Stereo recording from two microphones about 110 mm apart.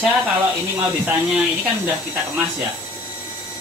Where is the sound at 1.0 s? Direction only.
15° right (ahead or behind).